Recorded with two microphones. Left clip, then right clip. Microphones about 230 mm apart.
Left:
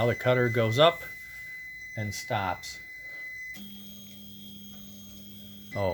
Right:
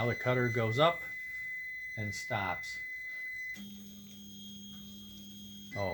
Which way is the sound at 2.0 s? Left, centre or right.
Left.